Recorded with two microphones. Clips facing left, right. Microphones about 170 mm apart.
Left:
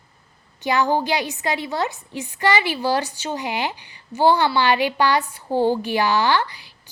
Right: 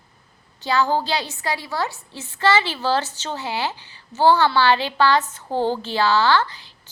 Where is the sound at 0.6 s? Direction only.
20° left (ahead or behind).